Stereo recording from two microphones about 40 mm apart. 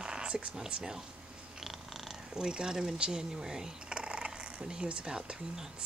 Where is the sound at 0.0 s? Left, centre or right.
Right.